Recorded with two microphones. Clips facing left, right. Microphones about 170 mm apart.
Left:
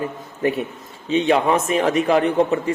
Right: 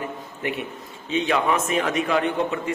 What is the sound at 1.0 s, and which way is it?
A man's voice, 30° left (ahead or behind).